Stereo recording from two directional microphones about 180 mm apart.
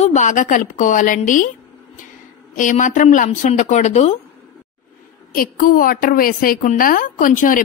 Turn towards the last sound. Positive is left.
turn(degrees=50)  # may be behind; listen again after turning